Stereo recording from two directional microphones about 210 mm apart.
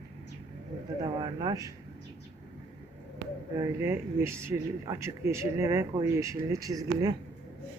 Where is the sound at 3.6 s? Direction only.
10° right (ahead or behind).